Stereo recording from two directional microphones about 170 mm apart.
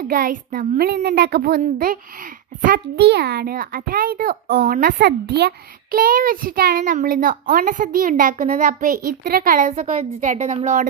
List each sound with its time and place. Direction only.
0.1 s a child's voice: 55° right (ahead or behind)
0.9 s speech: 75° right (ahead or behind)
1.6 s a child's voice: 55° right (ahead or behind)